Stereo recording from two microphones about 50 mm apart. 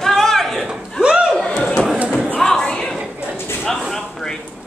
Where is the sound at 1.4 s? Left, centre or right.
Centre.